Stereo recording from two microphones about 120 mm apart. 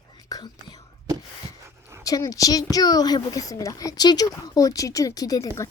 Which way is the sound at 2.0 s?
30° left (ahead or behind).